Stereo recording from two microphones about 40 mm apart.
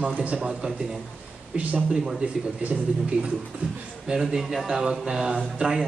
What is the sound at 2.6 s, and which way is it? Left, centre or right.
Speech, right.